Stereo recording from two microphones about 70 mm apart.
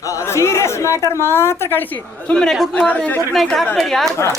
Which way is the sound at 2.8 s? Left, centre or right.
Centre.